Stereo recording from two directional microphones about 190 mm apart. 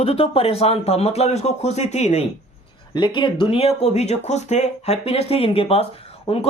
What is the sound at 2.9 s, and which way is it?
Speech, 25° left (ahead or behind).